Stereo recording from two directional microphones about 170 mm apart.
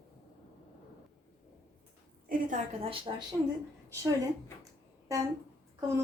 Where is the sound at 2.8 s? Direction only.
30° right (ahead or behind).